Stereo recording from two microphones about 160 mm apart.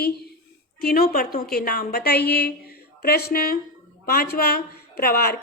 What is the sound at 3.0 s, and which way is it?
A woman's voice, 75° left (ahead or behind).